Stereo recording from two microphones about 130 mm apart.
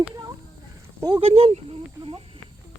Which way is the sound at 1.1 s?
50° right (ahead or behind).